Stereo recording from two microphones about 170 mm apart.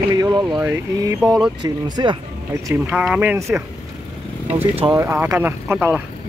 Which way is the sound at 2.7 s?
5° right (ahead or behind).